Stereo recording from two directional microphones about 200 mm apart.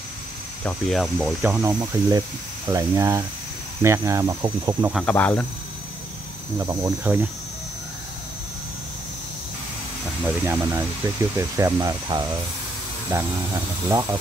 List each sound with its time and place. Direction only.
0.7 s speech: centre (ahead or behind); by 4.9 s 15° right (ahead or behind)
4.9 s speech: 5° left (ahead or behind)
6.6 s speech: 15° right (ahead or behind)
10.4 s speech: 15° right (ahead or behind)